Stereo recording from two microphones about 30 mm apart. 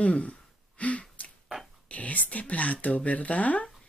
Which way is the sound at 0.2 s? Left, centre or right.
Left.